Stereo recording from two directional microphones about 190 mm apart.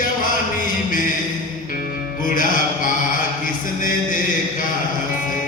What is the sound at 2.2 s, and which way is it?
Music, 45° left (ahead or behind).